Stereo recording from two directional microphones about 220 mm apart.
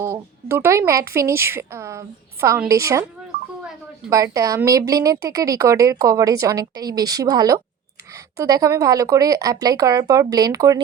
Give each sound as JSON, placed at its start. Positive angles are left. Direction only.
{"t": 0.0, "sound": "a woman's voice", "side_deg": -10}
{"t": 4.1, "sound": "a woman's voice", "side_deg": -15}